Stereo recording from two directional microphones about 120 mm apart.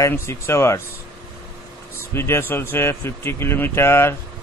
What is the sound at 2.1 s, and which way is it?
A man's voice, 20° left (ahead or behind).